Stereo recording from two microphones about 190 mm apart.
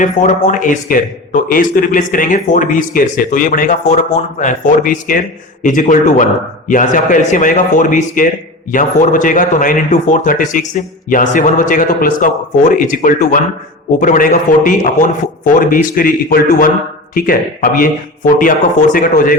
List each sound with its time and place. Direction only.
0.0 s speech: 40° left (ahead or behind)